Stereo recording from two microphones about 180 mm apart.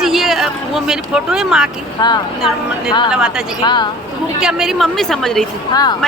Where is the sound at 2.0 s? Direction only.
25° left (ahead or behind).